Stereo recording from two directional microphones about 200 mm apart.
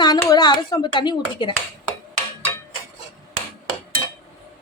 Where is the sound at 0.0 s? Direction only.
20° left (ahead or behind).